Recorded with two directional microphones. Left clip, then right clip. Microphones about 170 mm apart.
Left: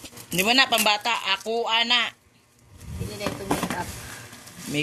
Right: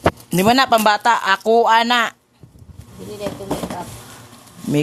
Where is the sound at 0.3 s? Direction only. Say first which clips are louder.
Right 5 dB; 40° right (ahead or behind).